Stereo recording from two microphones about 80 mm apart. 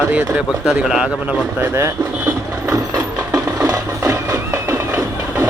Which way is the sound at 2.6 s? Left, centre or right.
Right.